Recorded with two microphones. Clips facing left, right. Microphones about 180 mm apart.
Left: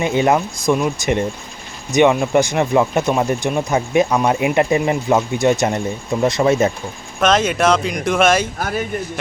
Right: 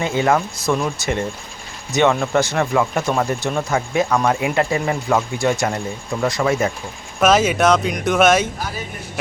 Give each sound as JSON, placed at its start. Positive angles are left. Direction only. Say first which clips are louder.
{"t": 0.0, "sound": "speech", "louder": "left 2 dB", "side_deg": 20}
{"t": 7.2, "sound": "speech", "louder": "right 1 dB", "side_deg": -5}